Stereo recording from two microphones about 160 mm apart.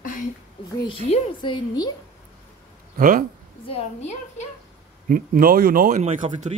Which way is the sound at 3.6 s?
40° left (ahead or behind).